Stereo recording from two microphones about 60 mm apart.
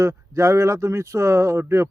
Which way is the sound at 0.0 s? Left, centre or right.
Right.